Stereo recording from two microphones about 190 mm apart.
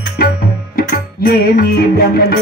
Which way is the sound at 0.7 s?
55° left (ahead or behind).